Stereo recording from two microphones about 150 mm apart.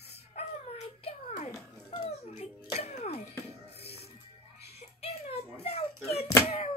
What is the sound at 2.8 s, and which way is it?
Music, 45° left (ahead or behind).